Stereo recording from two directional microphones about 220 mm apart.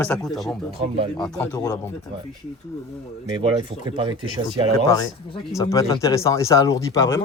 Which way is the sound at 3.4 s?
25° right (ahead or behind).